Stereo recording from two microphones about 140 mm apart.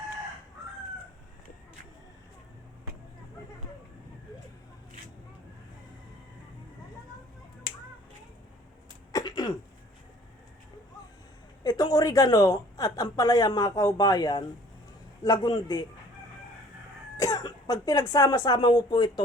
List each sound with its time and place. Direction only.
9.1 s a sound: 30° left (ahead or behind)
11.6 s a woman's voice: 25° left (ahead or behind)
17.2 s speech: 25° left (ahead or behind)